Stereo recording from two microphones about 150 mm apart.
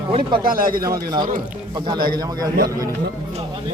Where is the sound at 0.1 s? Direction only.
35° right (ahead or behind).